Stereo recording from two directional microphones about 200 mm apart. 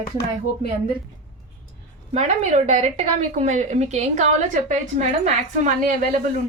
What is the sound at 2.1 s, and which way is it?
A woman's voice, 35° right (ahead or behind).